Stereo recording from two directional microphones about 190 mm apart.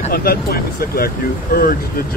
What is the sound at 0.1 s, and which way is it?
Speech, 50° left (ahead or behind).